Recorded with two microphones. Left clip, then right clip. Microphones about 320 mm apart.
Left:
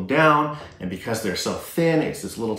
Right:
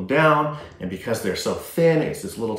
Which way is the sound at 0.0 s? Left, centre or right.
Centre.